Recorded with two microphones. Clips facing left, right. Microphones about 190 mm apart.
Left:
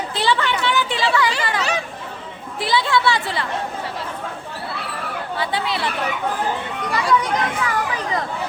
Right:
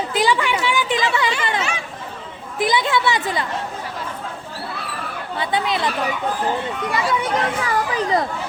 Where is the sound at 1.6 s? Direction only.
35° left (ahead or behind).